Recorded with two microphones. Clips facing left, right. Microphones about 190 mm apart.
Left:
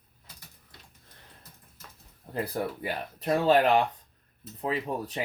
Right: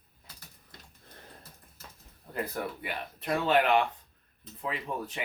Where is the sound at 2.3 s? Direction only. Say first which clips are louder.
Left 3 dB; 35° left (ahead or behind).